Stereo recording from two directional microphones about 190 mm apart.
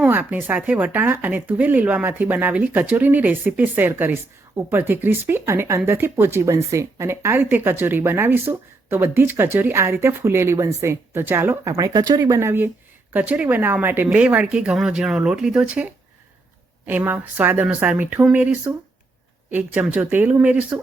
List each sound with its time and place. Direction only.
0.0 s speech: 10° right (ahead or behind)